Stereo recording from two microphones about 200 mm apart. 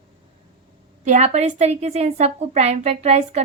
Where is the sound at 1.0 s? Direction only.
35° right (ahead or behind).